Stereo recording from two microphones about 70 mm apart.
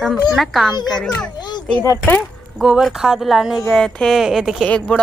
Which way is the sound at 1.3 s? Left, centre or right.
Left.